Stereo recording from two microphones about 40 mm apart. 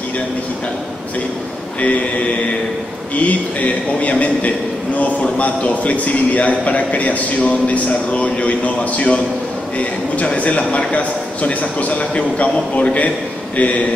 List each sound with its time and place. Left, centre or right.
3.2 s a man's voice: left